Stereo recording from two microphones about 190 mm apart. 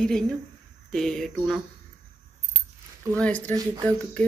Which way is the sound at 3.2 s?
5° left (ahead or behind).